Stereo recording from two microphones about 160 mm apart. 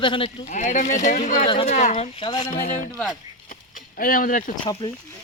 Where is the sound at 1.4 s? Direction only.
35° left (ahead or behind).